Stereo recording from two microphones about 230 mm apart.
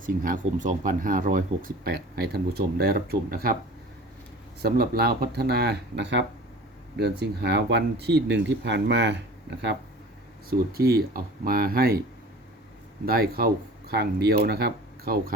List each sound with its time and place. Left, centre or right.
0.0 s speech: right
4.6 s speech: right
13.1 s speech: right